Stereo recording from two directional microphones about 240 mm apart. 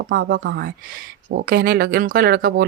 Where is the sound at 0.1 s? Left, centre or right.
Right.